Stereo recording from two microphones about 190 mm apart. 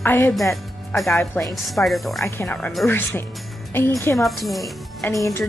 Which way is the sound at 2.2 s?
10° left (ahead or behind).